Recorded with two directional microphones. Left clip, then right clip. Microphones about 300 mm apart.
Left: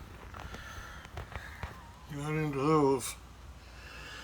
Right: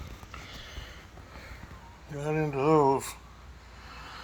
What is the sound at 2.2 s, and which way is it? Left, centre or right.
Speech, centre.